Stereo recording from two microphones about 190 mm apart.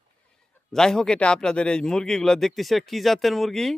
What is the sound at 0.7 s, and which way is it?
Speech, 5° left (ahead or behind).